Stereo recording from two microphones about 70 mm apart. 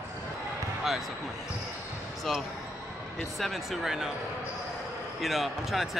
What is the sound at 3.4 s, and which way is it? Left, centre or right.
Speech, centre.